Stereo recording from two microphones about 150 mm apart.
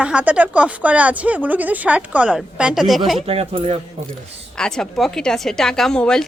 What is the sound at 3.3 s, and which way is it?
Speech, 40° right (ahead or behind).